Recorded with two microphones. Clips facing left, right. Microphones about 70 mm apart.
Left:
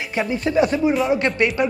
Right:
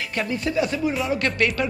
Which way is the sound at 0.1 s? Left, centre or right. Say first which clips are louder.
Left 5 dB; centre.